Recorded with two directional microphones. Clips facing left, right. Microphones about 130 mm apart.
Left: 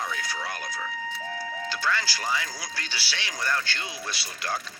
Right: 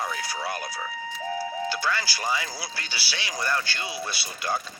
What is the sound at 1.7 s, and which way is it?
Speech, 10° right (ahead or behind).